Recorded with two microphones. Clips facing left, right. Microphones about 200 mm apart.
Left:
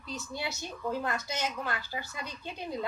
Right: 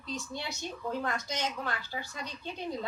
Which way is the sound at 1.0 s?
5° left (ahead or behind).